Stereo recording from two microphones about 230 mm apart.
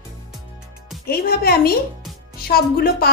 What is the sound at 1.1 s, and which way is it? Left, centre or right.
A woman's voice, left.